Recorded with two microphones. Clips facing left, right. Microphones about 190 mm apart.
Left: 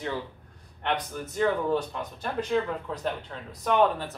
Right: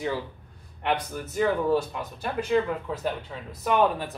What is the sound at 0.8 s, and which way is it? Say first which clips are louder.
Speech: right 2 dB; 5° right (ahead or behind).